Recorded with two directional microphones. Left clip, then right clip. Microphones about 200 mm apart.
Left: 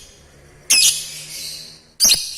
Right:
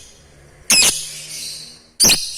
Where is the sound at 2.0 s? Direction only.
30° right (ahead or behind).